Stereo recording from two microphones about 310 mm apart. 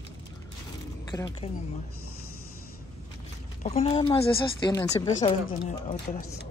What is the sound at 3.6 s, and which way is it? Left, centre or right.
Speech, centre.